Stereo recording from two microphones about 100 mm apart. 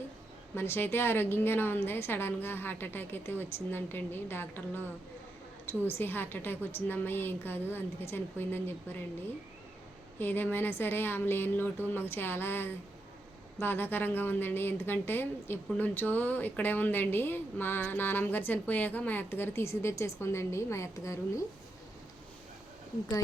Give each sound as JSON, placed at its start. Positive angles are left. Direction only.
{"t": 0.5, "sound": "a woman's voice", "side_deg": 25}
{"t": 10.2, "sound": "a woman's voice", "side_deg": 20}